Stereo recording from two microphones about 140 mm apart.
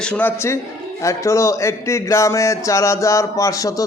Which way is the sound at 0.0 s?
10° left (ahead or behind).